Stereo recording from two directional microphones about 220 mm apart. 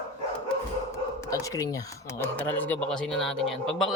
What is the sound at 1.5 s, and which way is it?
Speech, 15° left (ahead or behind).